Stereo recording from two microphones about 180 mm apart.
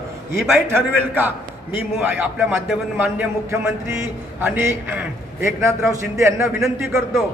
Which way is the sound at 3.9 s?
15° right (ahead or behind).